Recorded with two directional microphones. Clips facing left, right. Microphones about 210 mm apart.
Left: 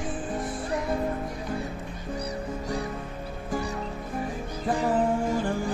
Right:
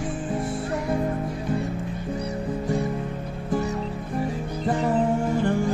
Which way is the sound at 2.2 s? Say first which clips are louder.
Right 2 dB; 25° right (ahead or behind).